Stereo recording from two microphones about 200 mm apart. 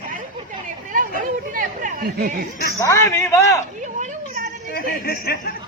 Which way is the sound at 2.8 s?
15° left (ahead or behind).